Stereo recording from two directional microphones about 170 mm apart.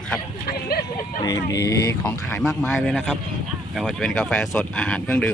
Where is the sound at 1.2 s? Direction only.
20° left (ahead or behind).